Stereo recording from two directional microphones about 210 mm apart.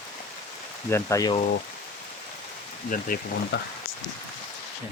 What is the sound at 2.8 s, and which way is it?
Speech, 40° left (ahead or behind).